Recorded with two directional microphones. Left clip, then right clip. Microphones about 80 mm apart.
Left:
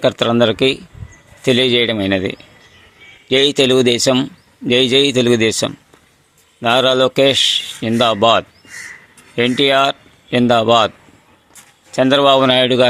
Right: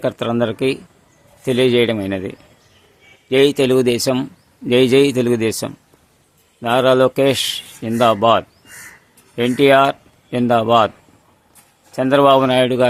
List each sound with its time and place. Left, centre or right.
0.0 s a man's voice: left
3.2 s a man's voice: left